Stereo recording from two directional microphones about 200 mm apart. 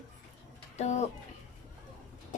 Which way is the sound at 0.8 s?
35° left (ahead or behind).